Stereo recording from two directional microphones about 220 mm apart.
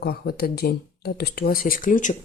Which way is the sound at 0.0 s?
45° left (ahead or behind).